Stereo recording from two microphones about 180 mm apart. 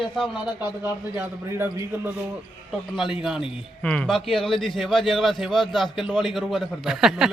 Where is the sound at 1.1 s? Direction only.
15° right (ahead or behind).